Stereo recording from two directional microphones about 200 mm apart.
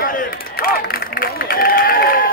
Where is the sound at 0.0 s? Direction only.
45° left (ahead or behind).